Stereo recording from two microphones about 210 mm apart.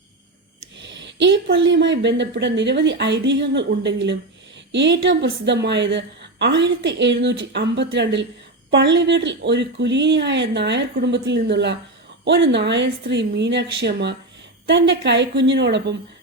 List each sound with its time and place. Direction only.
0.8 s speech: 55° right (ahead or behind)